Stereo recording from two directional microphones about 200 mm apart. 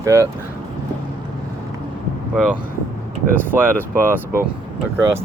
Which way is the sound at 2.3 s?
Centre (ahead or behind).